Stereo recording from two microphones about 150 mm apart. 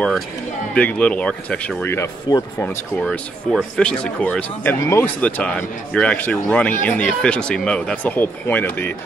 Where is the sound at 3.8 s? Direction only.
5° left (ahead or behind).